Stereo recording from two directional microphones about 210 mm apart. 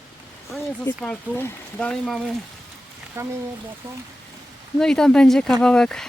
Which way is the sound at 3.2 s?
10° right (ahead or behind).